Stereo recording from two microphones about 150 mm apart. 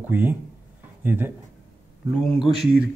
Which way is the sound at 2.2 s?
Centre (ahead or behind).